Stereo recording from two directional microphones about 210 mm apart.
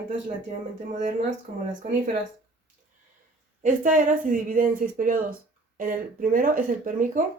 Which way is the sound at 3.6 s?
40° right (ahead or behind).